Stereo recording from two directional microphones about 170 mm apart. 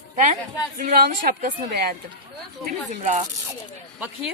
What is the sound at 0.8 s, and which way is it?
Speech, 60° right (ahead or behind).